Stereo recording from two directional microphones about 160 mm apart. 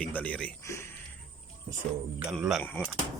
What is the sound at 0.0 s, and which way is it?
Speech, 10° left (ahead or behind).